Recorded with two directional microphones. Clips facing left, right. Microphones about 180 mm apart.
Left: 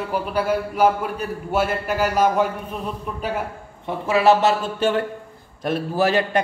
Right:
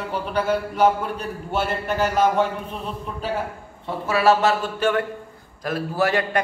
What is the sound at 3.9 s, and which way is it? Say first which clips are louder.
A man's voice: left 2 dB; 20° left (ahead or behind).